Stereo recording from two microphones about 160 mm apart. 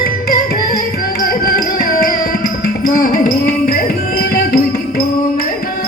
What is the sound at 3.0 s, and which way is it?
Music, 65° left (ahead or behind).